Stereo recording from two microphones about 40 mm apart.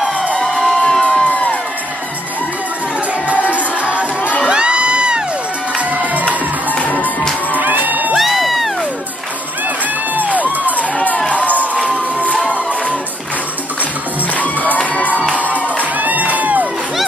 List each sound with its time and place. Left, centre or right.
0.4 s crowd: centre
1.0 s music: left
3.3 s music: right
4.5 s crowd: right
5.8 s music: right
6.2 s music: left
7.5 s music: right
8.2 s music: centre
10.1 s music: right
11.2 s crowd: left
14.3 s crowd: left
15.3 s music: right